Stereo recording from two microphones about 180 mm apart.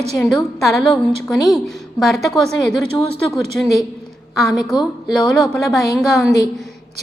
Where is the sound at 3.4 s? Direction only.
35° right (ahead or behind).